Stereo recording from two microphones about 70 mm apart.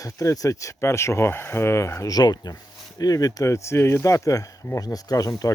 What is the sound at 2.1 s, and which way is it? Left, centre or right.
Speech, left.